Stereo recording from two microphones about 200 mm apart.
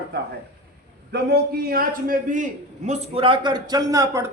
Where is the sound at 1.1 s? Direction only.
55° right (ahead or behind).